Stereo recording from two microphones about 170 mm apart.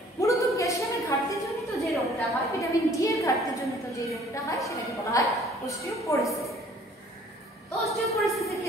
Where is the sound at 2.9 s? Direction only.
20° left (ahead or behind).